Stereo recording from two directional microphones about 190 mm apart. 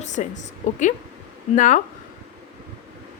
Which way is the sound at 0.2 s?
40° left (ahead or behind).